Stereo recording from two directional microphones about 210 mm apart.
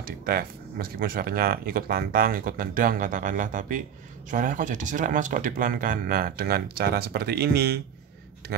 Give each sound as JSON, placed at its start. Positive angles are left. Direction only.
{"t": 0.0, "sound": "speech", "side_deg": -45}